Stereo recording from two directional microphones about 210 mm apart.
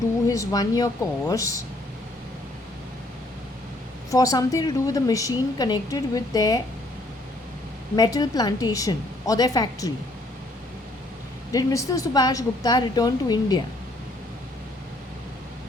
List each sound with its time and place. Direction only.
0.3 s a woman's voice: 15° left (ahead or behind)
4.1 s a woman's voice: 15° left (ahead or behind)
7.9 s a woman's voice: 20° left (ahead or behind)
11.5 s a woman's voice: 15° left (ahead or behind)